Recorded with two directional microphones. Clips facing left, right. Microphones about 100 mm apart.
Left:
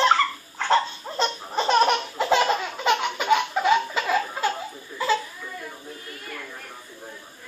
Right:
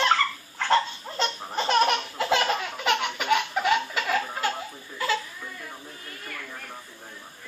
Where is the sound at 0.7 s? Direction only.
25° left (ahead or behind).